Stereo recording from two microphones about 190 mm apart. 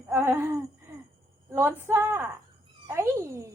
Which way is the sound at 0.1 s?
10° right (ahead or behind).